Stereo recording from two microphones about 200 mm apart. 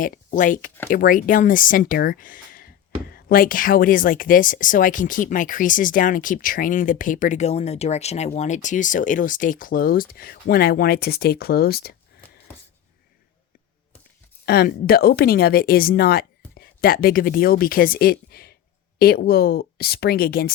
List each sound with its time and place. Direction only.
0.0 s speech: 40° left (ahead or behind)
14.4 s speech: 50° left (ahead or behind)